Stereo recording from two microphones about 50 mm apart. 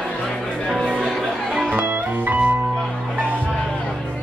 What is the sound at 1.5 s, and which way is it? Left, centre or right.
Music, right.